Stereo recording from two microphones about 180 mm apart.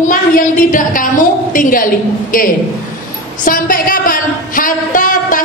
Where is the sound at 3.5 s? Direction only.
50° left (ahead or behind).